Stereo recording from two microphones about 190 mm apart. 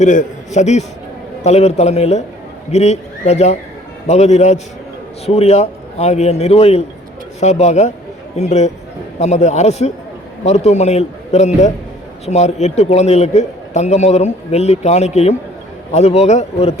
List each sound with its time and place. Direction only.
0.0 s a man's voice: 40° left (ahead or behind)